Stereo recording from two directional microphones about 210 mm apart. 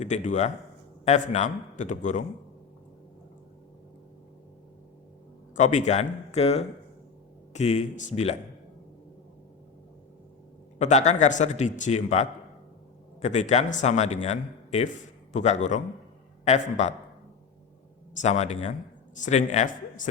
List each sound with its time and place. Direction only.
0.0 s a man's voice: 35° left (ahead or behind)
5.5 s a man's voice: 35° left (ahead or behind)
10.8 s a man's voice: 35° left (ahead or behind)
18.2 s a man's voice: 30° left (ahead or behind)